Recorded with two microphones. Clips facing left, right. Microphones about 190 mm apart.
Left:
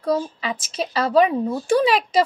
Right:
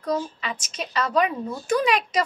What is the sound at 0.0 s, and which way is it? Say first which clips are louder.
A woman's voice: left 4 dB; 30° left (ahead or behind).